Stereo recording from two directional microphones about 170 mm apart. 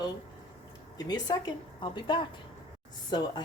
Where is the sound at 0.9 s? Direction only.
25° left (ahead or behind).